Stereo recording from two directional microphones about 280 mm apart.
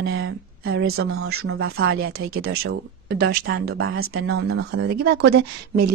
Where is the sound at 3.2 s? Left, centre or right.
Right.